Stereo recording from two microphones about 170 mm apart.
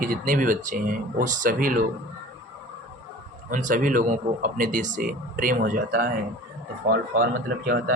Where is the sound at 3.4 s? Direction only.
50° right (ahead or behind).